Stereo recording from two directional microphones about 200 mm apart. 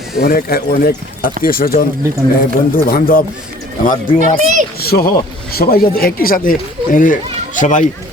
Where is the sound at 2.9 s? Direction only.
45° left (ahead or behind).